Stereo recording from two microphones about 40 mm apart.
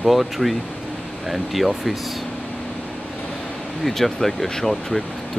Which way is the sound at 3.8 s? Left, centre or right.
Centre.